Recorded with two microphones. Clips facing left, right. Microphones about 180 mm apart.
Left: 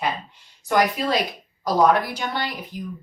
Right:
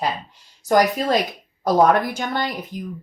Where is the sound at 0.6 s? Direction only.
40° right (ahead or behind).